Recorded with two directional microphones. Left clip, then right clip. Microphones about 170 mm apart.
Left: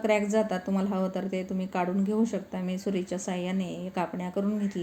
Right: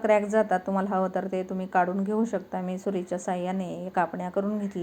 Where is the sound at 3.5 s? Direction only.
45° right (ahead or behind).